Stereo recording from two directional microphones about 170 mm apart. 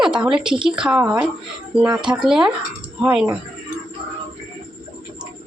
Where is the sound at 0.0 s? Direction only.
5° right (ahead or behind).